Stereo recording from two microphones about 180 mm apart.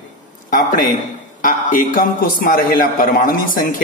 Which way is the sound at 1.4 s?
50° left (ahead or behind).